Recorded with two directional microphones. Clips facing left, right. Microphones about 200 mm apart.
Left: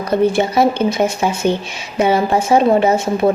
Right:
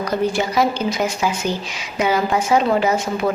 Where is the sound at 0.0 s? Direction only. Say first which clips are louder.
Left 5 dB; 25° left (ahead or behind).